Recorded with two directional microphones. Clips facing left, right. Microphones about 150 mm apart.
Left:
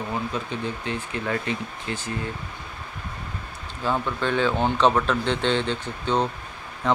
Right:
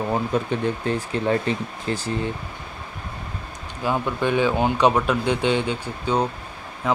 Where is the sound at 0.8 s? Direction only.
35° right (ahead or behind).